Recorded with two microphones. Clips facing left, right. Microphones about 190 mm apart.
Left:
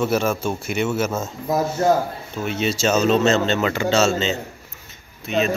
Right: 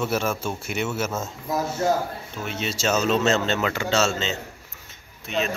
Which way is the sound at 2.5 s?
Centre (ahead or behind).